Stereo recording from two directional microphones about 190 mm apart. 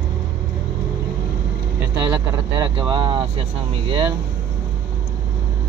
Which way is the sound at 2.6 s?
25° right (ahead or behind).